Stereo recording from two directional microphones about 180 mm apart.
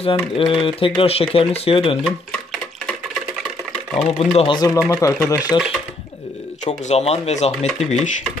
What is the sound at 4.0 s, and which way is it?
Speech, 30° left (ahead or behind).